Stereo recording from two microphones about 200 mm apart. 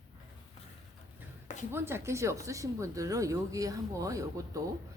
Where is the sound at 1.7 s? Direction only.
10° right (ahead or behind).